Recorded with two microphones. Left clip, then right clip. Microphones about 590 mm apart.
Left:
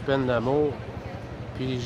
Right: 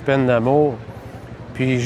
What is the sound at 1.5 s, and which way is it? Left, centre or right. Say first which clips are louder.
Speech: right 11 dB; right.